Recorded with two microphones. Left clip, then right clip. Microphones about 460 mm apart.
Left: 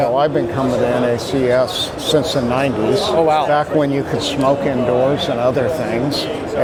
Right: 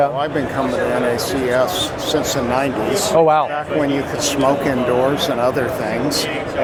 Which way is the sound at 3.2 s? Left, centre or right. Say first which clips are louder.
Right 3 dB; right.